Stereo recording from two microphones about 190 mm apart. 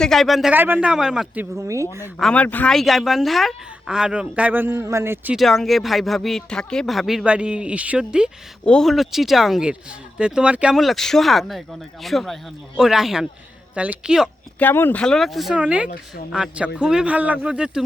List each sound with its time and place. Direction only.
0.0 s speech: centre (ahead or behind)
1.5 s speech: 15° right (ahead or behind)
2.1 s speech: 5° left (ahead or behind)
14.6 s speech: 10° left (ahead or behind); by 17.8 s 5° right (ahead or behind)